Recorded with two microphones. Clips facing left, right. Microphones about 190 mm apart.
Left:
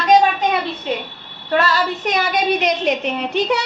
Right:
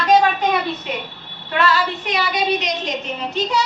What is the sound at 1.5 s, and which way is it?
A woman's voice, 40° left (ahead or behind).